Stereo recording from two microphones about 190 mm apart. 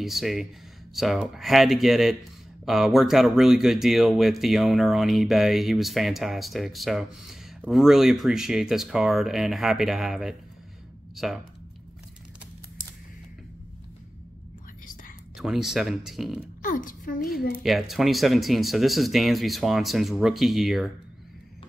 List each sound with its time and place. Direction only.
0.0 s speech: centre (ahead or behind)
15.3 s speech: centre (ahead or behind)
16.6 s a woman's voice: 45° left (ahead or behind)
17.6 s speech: centre (ahead or behind)